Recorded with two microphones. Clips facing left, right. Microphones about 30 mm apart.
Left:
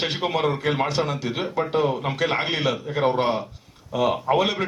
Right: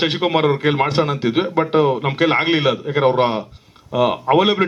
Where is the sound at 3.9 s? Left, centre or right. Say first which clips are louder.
Right 5 dB; right.